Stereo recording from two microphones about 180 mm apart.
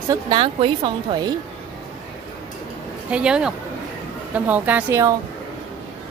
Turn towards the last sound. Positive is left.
turn(degrees=-15)  # may be behind; listen again after turning